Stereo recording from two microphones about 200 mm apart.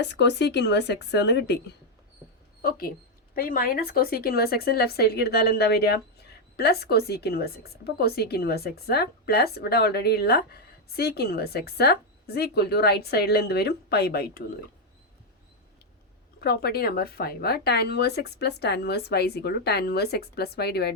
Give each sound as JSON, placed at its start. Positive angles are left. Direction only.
{"t": 0.0, "sound": "speech", "side_deg": 60}
{"t": 2.6, "sound": "a woman's voice", "side_deg": 50}
{"t": 16.4, "sound": "a woman's voice", "side_deg": 55}